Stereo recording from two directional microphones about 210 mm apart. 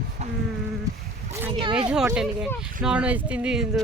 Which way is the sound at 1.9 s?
5° right (ahead or behind).